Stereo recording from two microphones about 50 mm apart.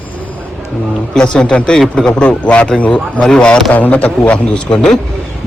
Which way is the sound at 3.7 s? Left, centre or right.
Left.